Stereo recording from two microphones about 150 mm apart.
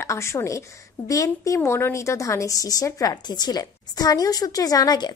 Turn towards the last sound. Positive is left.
turn(degrees=25)  # may be behind; listen again after turning